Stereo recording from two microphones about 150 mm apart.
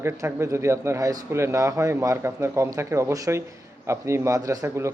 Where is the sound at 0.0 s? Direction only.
15° right (ahead or behind).